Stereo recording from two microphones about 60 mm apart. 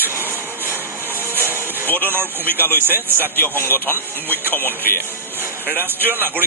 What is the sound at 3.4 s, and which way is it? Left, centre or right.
Speech, left.